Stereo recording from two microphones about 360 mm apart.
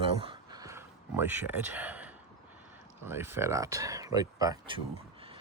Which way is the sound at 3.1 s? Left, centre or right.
Centre.